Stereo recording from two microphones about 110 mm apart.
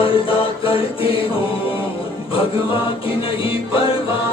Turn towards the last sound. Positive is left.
turn(degrees=55)  # may be behind; listen again after turning